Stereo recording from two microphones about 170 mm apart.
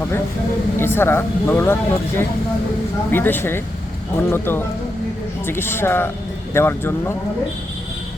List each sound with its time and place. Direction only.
0.8 s speech: 15° left (ahead or behind)